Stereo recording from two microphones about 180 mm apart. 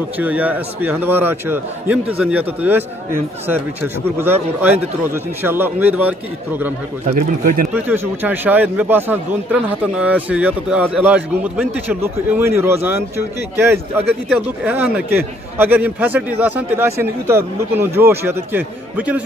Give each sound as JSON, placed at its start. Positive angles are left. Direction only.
{"t": 0.2, "sound": "a man's voice", "side_deg": -10}
{"t": 7.1, "sound": "speech", "side_deg": -45}
{"t": 7.7, "sound": "a man's voice", "side_deg": -10}